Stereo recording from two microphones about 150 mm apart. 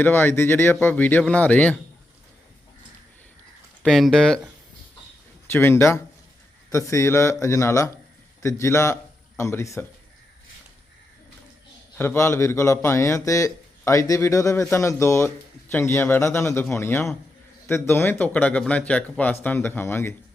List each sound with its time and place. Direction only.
0.0 s speech: 15° left (ahead or behind)
3.8 s speech: 5° left (ahead or behind)
5.5 s a man's voice: 15° left (ahead or behind)
11.9 s a man's voice: 15° left (ahead or behind)